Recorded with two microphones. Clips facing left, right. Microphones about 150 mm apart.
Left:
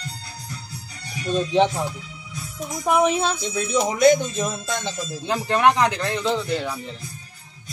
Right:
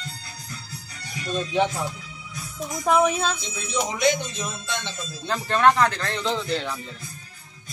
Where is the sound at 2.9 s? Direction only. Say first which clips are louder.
Left 1 dB; 20° left (ahead or behind).